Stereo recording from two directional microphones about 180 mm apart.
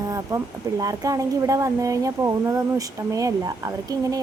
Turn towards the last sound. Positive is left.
turn(degrees=-20)  # may be behind; listen again after turning